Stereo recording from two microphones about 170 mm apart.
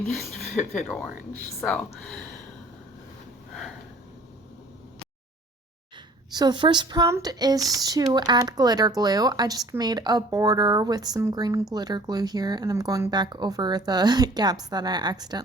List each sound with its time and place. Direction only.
0.9 s speech: 10° left (ahead or behind)
6.3 s speech: 25° right (ahead or behind)